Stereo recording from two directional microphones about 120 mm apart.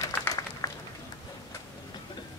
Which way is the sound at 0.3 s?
30° left (ahead or behind).